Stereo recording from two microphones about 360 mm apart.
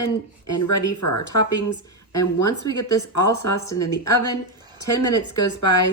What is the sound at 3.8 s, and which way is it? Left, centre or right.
Speech, left.